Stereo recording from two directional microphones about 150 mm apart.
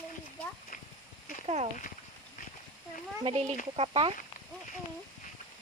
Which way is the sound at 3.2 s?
45° right (ahead or behind).